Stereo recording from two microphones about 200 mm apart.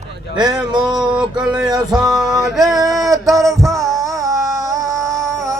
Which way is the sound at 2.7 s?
15° right (ahead or behind).